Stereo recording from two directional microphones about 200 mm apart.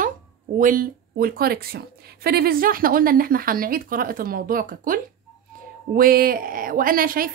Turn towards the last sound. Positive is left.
turn(degrees=-45)  # may be behind; listen again after turning